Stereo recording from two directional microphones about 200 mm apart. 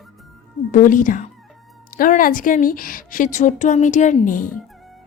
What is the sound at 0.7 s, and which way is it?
Speech, 40° left (ahead or behind).